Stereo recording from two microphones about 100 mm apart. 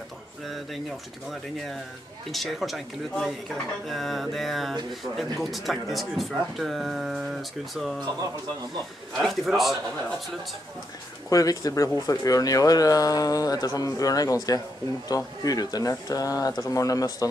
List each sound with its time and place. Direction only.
2.3 s speech: centre (ahead or behind)
9.2 s speech: centre (ahead or behind)
11.2 s speech: 35° left (ahead or behind)